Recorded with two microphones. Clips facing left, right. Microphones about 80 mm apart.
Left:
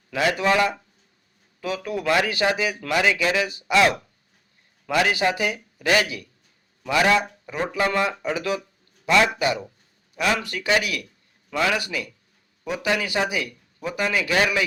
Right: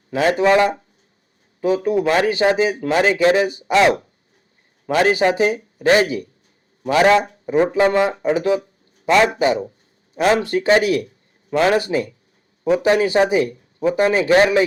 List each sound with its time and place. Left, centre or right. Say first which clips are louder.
0.1 s a man's voice: right 6 dB; right
5.1 s a man's voice: right 7 dB; right